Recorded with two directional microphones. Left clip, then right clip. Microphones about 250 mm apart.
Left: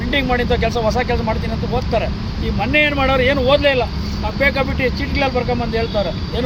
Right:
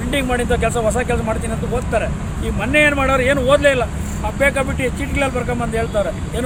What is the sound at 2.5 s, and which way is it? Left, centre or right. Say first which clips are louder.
Speech: right 1 dB; centre.